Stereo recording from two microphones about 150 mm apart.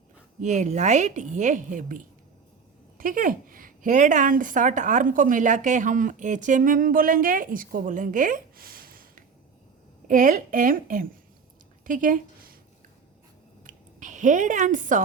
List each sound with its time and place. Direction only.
0.4 s a woman's voice: 55° right (ahead or behind)
3.0 s a woman's voice: 65° right (ahead or behind)
10.1 s a woman's voice: 60° right (ahead or behind)
13.7 s a sound: 55° right (ahead or behind)